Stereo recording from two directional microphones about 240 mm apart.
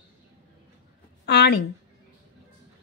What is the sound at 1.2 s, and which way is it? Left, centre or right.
Speech, left.